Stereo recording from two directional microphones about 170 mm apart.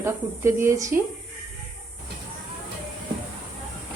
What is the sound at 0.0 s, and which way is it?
Speech, 15° right (ahead or behind).